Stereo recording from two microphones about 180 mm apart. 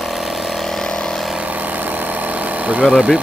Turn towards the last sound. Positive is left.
turn(degrees=-5)  # may be behind; listen again after turning